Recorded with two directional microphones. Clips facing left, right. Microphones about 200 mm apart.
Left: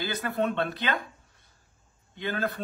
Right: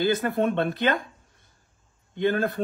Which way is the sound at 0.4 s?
50° right (ahead or behind).